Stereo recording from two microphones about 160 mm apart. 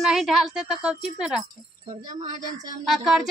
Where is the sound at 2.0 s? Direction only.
50° right (ahead or behind).